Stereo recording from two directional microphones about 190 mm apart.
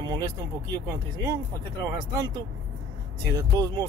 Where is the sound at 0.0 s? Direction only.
20° right (ahead or behind).